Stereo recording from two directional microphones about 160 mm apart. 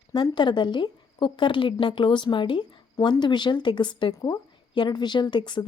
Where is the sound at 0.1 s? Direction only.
30° left (ahead or behind).